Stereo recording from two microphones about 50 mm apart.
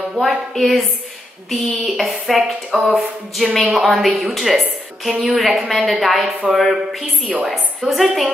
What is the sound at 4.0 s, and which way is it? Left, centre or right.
A woman's voice, centre.